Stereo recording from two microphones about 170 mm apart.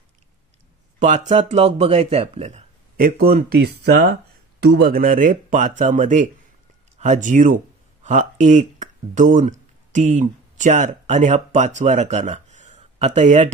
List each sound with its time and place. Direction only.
0.9 s speech: 45° right (ahead or behind)
3.0 s speech: 60° right (ahead or behind)
3.4 s speech: 70° right (ahead or behind); by 13.5 s 45° right (ahead or behind)